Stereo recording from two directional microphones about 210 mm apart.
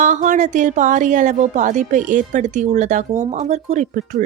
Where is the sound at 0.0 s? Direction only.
35° right (ahead or behind).